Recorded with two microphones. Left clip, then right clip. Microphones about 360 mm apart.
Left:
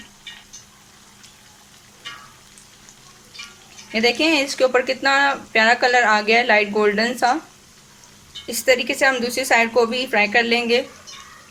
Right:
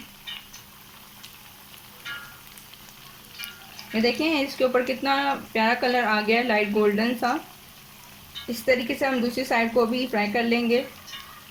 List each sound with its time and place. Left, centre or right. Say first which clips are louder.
4.0 s speech: left 6 dB; left
8.4 s speech: left 5 dB; left